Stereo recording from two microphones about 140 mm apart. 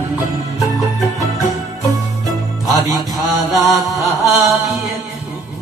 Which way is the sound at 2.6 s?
25° left (ahead or behind).